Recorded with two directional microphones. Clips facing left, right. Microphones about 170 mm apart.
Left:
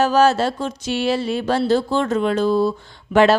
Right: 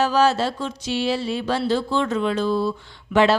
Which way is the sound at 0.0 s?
45° left (ahead or behind).